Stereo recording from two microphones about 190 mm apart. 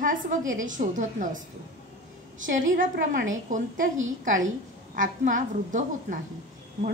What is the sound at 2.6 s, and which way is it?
A woman's voice, 45° right (ahead or behind).